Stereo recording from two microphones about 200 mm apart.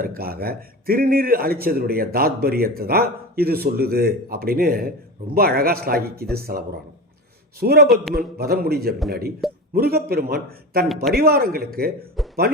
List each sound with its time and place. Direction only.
0.0 s speech: 45° right (ahead or behind)
7.6 s speech: 50° right (ahead or behind)
10.8 s a man's voice: centre (ahead or behind)
11.1 s speech: 50° right (ahead or behind)
12.2 s a sound: centre (ahead or behind)